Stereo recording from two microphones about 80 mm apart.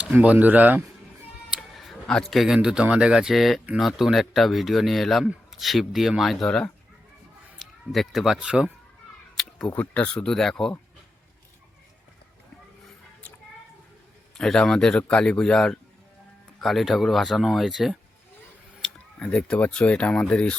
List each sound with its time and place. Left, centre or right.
0.0 s speech: centre
1.5 s a sound: centre
2.6 s speech: centre
7.6 s a sound: centre
7.9 s speech: centre
9.3 s cat: centre
9.9 s a man's voice: centre
14.3 s a man's voice: centre
18.8 s speech: centre